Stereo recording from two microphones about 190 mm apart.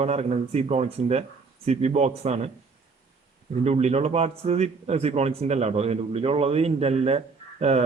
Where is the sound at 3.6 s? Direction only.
35° right (ahead or behind).